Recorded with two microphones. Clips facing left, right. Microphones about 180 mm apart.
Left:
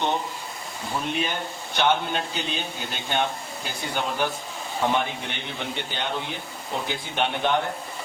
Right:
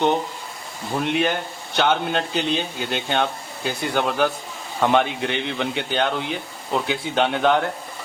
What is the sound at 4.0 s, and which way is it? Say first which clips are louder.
A man's voice: right 5 dB; 75° right (ahead or behind).